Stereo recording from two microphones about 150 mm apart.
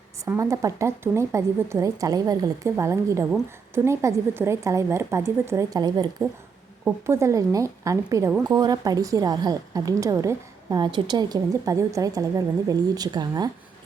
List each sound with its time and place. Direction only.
0.3 s a woman's voice: 20° right (ahead or behind)